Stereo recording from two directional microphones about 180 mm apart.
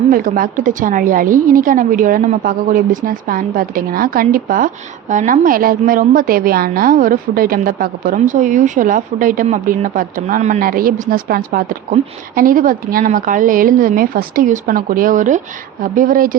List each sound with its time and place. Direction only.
0.1 s a woman's voice: 50° right (ahead or behind)